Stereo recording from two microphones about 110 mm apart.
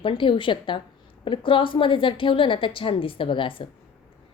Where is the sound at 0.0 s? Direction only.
50° left (ahead or behind).